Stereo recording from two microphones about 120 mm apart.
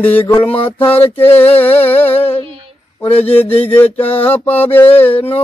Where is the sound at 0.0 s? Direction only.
15° left (ahead or behind).